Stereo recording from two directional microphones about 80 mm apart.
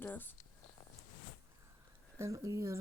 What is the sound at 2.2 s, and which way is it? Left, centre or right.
Speech, right.